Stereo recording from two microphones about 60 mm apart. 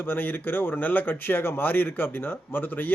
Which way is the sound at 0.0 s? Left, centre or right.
Left.